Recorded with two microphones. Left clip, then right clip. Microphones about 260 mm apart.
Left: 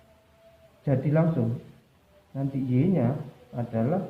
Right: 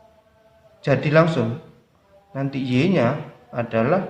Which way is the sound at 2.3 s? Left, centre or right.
Right.